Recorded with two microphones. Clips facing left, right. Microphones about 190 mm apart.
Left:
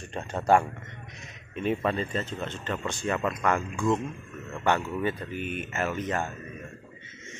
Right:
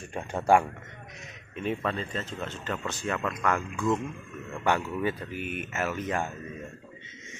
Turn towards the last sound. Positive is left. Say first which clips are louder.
# left 1 dB
turn(degrees=-10)  # may be behind; listen again after turning